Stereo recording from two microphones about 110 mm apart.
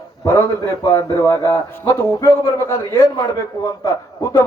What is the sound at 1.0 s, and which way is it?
A man's voice, 30° left (ahead or behind).